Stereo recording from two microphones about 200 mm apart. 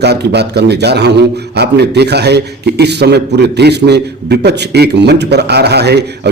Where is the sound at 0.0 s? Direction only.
55° right (ahead or behind).